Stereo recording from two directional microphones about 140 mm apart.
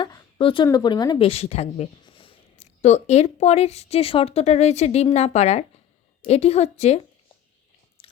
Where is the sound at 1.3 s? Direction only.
50° left (ahead or behind).